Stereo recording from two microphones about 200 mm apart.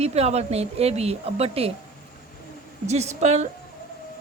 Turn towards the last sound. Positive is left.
turn(degrees=-35)  # may be behind; listen again after turning